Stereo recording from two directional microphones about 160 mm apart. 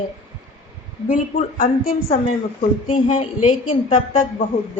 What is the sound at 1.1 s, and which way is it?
Speech, 55° left (ahead or behind).